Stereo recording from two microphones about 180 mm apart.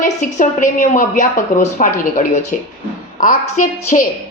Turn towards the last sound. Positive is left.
turn(degrees=45)  # may be behind; listen again after turning